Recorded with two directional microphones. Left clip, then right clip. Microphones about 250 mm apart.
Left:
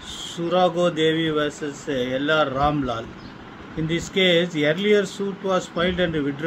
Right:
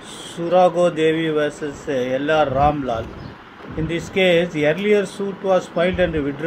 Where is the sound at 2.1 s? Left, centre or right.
Right.